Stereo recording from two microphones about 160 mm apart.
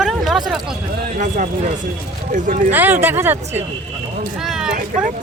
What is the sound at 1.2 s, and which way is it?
Speech, 50° right (ahead or behind).